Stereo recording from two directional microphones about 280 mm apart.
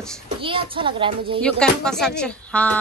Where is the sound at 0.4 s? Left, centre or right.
Centre.